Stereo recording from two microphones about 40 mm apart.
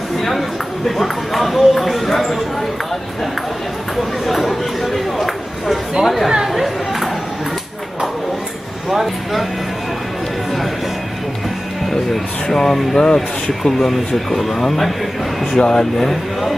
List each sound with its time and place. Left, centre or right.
0.2 s speech: centre
4.3 s speech: centre
6.5 s chatter: centre
8.9 s speech: centre
11.9 s speech: centre
15.5 s speech: centre